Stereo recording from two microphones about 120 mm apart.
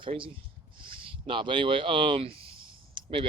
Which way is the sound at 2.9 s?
45° right (ahead or behind).